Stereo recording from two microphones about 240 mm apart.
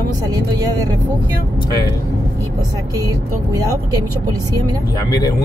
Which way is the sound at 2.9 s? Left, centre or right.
Centre.